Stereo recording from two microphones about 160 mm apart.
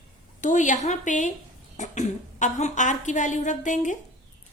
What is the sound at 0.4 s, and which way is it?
A woman's voice, 50° left (ahead or behind).